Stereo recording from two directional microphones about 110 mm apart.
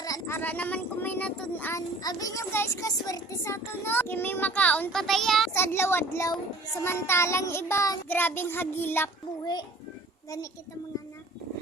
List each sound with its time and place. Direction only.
0.0 s a sound: 35° left (ahead or behind)
0.3 s child singing: 15° left (ahead or behind)
2.0 s a child's voice: 35° left (ahead or behind)
3.1 s child singing: 25° left (ahead or behind)
4.9 s a child's voice: 5° left (ahead or behind)
5.5 s child singing: 20° left (ahead or behind)